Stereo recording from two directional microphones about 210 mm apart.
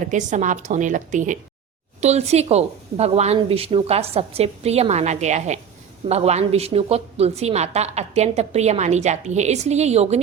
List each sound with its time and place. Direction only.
0.0 s a woman's voice: 35° right (ahead or behind)